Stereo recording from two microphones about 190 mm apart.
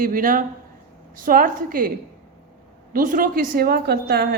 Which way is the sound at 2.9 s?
45° right (ahead or behind).